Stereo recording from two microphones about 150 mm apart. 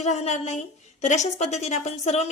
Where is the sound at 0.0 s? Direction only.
50° left (ahead or behind).